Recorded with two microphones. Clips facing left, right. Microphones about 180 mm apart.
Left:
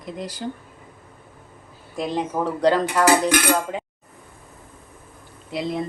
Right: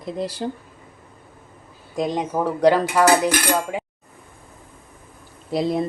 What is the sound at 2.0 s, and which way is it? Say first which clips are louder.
Speech: right 2 dB; 15° right (ahead or behind).